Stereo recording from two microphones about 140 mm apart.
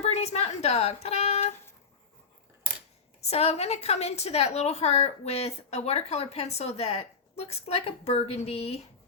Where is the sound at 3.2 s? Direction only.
50° left (ahead or behind).